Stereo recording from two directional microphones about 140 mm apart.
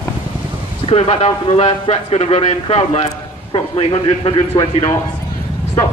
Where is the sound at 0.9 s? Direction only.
45° left (ahead or behind).